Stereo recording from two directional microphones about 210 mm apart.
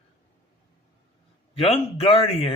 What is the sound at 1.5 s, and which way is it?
A man's voice, 25° left (ahead or behind).